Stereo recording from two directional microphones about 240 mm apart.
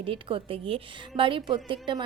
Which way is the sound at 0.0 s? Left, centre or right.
Right.